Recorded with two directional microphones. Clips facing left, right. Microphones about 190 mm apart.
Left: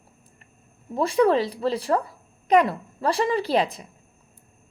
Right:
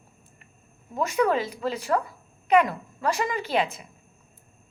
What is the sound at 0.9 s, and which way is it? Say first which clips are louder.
Speech: left 4 dB; 30° left (ahead or behind).